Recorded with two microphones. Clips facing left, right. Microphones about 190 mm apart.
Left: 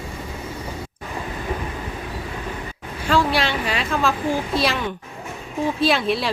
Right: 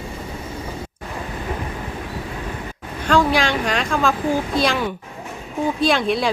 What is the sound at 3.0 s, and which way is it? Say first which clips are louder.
Speech: right 2 dB; 5° left (ahead or behind).